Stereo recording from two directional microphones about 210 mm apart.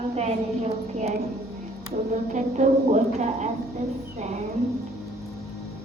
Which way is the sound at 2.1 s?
35° right (ahead or behind).